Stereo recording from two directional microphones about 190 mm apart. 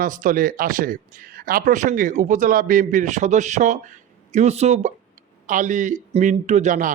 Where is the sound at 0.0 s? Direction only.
45° right (ahead or behind).